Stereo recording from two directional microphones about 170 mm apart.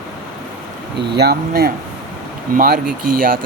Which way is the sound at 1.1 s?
70° right (ahead or behind).